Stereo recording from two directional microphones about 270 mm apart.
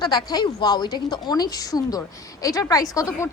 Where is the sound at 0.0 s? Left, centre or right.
Centre.